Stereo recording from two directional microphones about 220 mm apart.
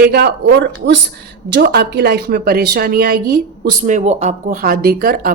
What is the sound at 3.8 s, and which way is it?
Speech, 35° right (ahead or behind).